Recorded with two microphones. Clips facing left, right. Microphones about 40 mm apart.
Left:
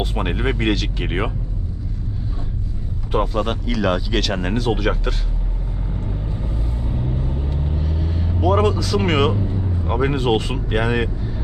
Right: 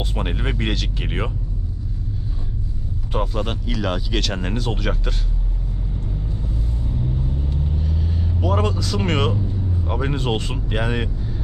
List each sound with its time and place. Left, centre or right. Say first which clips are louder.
0.0 s speech: left 4 dB; centre
3.1 s speech: left 4 dB; centre
6.3 s vehicle: left 1 dB; left
7.8 s vehicle: left 1 dB; centre
8.4 s speech: left 5 dB; centre
9.5 s a sound: left 2 dB; left
9.8 s speech: left 5 dB; centre